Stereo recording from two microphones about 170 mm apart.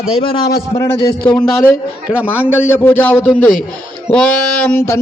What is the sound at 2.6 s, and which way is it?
Speech, 15° left (ahead or behind).